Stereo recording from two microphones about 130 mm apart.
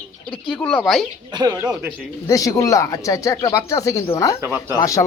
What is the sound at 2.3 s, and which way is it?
Speech, 25° left (ahead or behind).